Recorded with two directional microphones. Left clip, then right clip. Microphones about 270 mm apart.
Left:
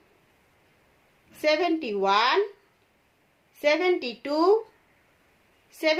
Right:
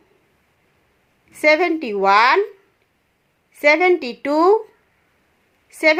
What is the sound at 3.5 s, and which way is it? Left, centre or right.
A woman's voice, right.